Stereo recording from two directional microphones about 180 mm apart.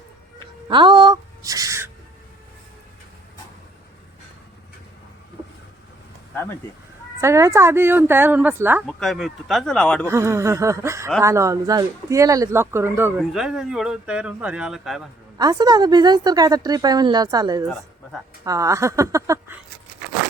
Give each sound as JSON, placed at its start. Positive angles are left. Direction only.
{"t": 0.7, "sound": "speech", "side_deg": -25}
{"t": 6.3, "sound": "speech", "side_deg": 10}
{"t": 7.2, "sound": "speech", "side_deg": -15}
{"t": 8.9, "sound": "speech", "side_deg": 0}
{"t": 10.1, "sound": "speech", "side_deg": -15}
{"t": 13.1, "sound": "speech", "side_deg": 0}
{"t": 15.4, "sound": "a woman's voice", "side_deg": -20}